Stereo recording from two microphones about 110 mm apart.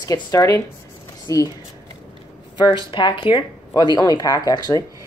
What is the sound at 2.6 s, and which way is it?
A woman's voice, 50° left (ahead or behind).